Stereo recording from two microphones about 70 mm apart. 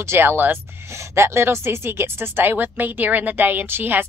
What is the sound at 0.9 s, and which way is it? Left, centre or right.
Speech, right.